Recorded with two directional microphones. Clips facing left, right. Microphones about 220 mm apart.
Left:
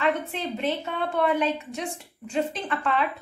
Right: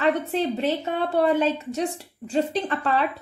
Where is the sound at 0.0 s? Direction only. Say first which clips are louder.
Right 4 dB; 40° right (ahead or behind).